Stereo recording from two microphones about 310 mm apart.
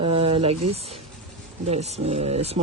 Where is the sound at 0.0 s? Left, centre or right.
Centre.